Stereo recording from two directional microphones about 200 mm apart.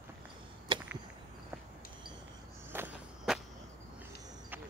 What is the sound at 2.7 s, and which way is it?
Walk, 5° right (ahead or behind).